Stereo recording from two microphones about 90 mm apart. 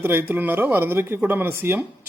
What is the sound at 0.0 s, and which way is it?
Speech, 25° right (ahead or behind).